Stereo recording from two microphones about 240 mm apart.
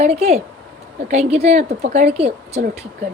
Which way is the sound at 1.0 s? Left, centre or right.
Right.